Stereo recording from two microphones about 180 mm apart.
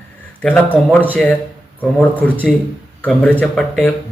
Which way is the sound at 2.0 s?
10° left (ahead or behind).